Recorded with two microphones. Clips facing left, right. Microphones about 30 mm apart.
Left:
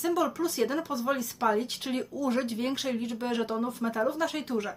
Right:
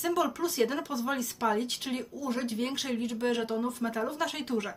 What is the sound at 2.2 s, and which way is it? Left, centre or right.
Speech, left.